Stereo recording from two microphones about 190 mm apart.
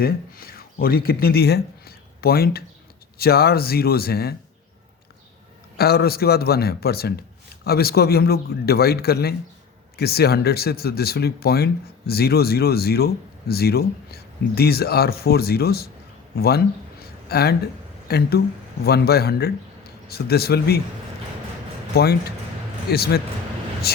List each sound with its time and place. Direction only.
0.0 s speech: 50° left (ahead or behind)
5.7 s a man's voice: 55° left (ahead or behind)
21.9 s a man's voice: 55° left (ahead or behind)